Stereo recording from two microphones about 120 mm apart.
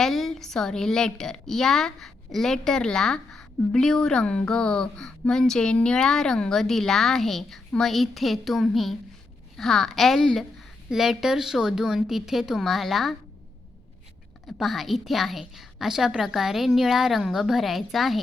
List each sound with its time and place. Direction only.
0.0 s a woman's voice: centre (ahead or behind)
14.4 s a woman's voice: centre (ahead or behind)